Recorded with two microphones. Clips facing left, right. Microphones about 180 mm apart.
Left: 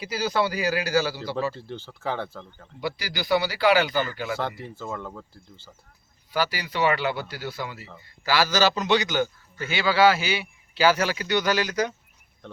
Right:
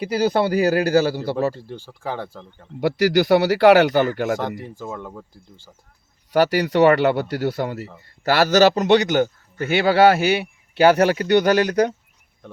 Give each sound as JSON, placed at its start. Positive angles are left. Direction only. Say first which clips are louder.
{"t": 0.0, "sound": "a man's voice", "louder": "right 6 dB", "side_deg": -55}
{"t": 1.5, "sound": "speech", "louder": "right 2 dB", "side_deg": -10}
{"t": 2.8, "sound": "speech", "louder": "right 13 dB", "side_deg": -75}
{"t": 4.4, "sound": "speech", "louder": "right 3 dB", "side_deg": -15}
{"t": 6.3, "sound": "a man's voice", "louder": "right 10 dB", "side_deg": -65}